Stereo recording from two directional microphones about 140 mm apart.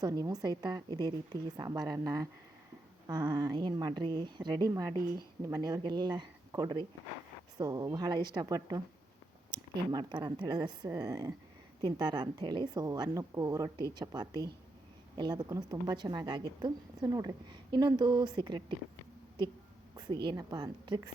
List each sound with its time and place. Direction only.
0.0 s a woman's voice: 25° right (ahead or behind)
20.0 s a woman's voice: 30° right (ahead or behind)